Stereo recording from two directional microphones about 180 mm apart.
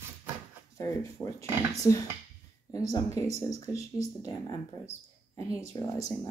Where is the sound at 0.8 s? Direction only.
15° left (ahead or behind).